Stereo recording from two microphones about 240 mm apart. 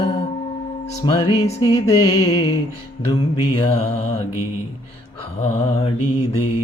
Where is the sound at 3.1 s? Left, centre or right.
Left.